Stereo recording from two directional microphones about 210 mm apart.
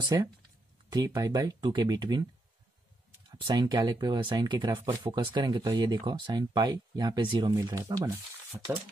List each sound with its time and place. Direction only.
0.0 s speech: 15° right (ahead or behind)
3.3 s speech: 20° right (ahead or behind)